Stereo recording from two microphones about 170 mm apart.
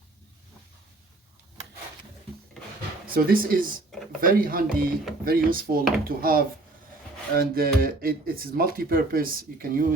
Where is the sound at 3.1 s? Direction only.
60° right (ahead or behind).